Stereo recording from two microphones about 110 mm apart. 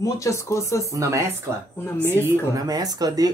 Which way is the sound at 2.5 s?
35° right (ahead or behind).